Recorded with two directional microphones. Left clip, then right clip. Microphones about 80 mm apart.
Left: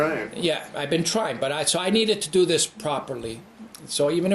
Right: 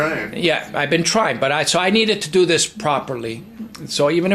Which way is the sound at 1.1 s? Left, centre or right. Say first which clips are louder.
Right 8 dB; left.